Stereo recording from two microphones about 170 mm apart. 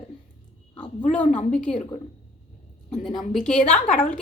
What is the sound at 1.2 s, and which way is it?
Speech, 50° left (ahead or behind).